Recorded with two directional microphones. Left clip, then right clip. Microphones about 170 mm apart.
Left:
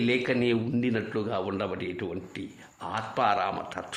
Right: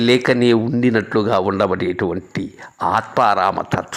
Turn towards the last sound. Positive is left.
turn(degrees=-35)  # may be behind; listen again after turning